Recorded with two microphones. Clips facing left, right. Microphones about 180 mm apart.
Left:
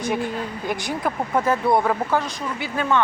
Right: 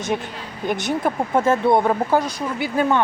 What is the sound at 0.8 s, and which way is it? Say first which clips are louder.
Speech: right 3 dB; 25° right (ahead or behind).